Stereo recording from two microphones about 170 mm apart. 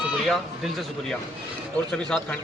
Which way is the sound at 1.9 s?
5° left (ahead or behind).